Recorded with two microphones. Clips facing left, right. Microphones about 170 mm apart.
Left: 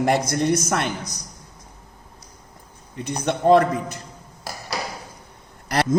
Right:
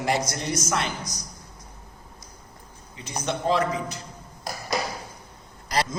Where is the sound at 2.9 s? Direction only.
55° left (ahead or behind).